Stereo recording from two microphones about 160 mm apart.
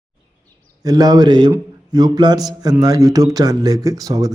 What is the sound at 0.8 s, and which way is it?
Speech, 25° right (ahead or behind).